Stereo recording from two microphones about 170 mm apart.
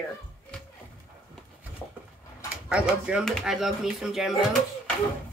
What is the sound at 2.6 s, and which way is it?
Speech, 5° right (ahead or behind).